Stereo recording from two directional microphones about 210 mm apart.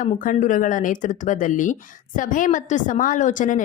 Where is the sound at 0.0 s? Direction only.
40° left (ahead or behind).